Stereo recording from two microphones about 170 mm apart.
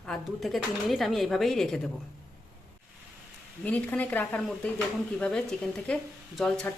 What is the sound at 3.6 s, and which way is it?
Speech, 10° left (ahead or behind).